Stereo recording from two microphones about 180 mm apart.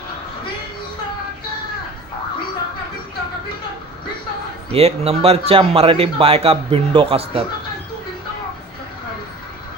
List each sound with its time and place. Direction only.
4.7 s a man's voice: 35° right (ahead or behind)